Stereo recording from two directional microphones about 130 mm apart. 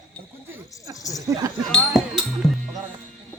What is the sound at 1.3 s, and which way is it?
Speech, 25° right (ahead or behind).